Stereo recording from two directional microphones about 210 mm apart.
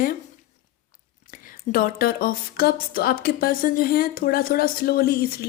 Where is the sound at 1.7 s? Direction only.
45° left (ahead or behind).